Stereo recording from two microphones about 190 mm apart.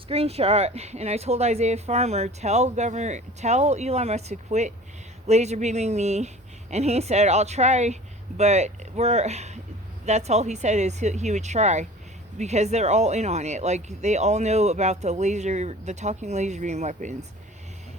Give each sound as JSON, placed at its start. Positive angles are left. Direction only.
{"t": 0.1, "sound": "speech", "side_deg": -30}